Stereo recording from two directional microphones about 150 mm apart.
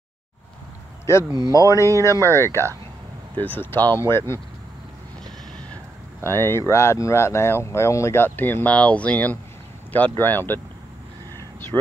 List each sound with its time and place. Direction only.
1.1 s speech: 20° left (ahead or behind)
6.2 s speech: 15° left (ahead or behind)